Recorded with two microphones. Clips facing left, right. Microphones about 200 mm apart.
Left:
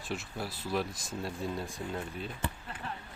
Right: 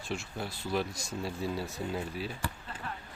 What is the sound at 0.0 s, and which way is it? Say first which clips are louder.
Speech: right 1 dB; centre (ahead or behind).